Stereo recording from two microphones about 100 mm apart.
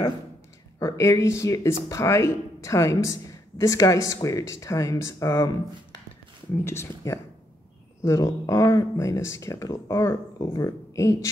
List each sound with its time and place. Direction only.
0.7 s speech: 30° left (ahead or behind)